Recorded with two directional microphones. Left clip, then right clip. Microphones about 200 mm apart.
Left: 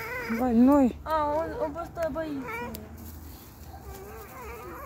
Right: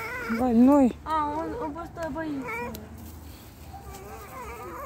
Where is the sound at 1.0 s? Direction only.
40° left (ahead or behind).